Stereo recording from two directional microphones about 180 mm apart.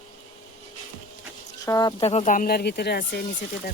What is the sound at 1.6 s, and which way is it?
Speech, 20° left (ahead or behind).